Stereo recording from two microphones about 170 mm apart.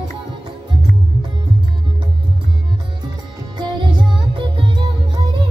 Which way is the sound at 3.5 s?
25° right (ahead or behind).